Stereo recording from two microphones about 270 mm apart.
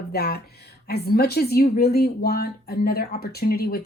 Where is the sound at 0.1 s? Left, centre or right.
Left.